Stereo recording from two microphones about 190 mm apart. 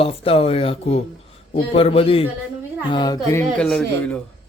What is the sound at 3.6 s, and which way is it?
Speech, 5° left (ahead or behind).